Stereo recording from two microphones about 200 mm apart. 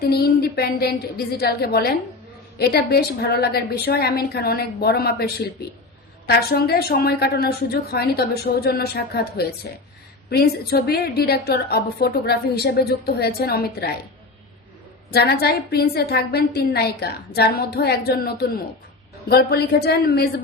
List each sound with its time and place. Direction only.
0.0 s a woman's voice: 50° left (ahead or behind)
15.1 s a woman's voice: 55° left (ahead or behind)